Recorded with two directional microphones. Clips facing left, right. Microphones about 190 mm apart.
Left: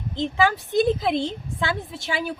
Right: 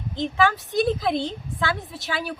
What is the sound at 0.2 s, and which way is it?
A woman's voice, 25° left (ahead or behind).